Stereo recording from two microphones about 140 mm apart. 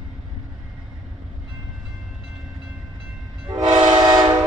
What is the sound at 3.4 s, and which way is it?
Train, 35° right (ahead or behind).